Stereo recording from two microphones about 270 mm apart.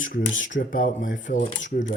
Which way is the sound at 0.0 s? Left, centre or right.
Left.